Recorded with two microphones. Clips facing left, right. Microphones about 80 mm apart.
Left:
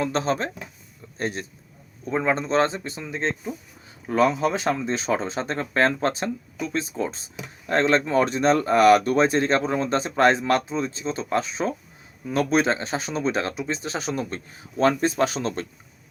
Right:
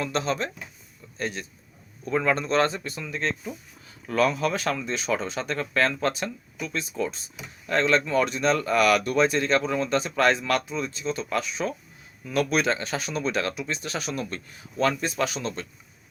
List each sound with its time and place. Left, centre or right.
0.0 s speech: left
2.0 s speech: left